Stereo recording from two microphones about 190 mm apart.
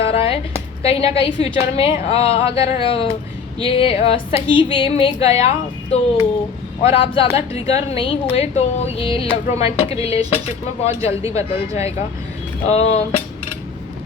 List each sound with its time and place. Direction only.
0.0 s a sound: 30° left (ahead or behind)
0.8 s a woman's voice: 30° left (ahead or behind)
10.8 s speech: 15° right (ahead or behind)
12.6 s a woman's voice: 35° left (ahead or behind)